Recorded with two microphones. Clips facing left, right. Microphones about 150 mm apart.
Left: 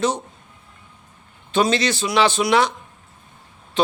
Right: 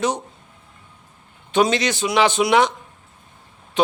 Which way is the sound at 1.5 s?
15° right (ahead or behind).